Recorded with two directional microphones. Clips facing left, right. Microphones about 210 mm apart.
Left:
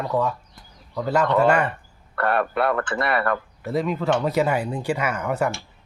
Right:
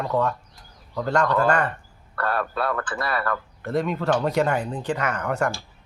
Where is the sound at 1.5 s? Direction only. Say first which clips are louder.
Left 2 dB; 10° left (ahead or behind).